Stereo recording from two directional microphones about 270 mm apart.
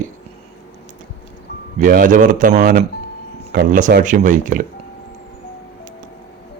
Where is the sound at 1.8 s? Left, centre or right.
Right.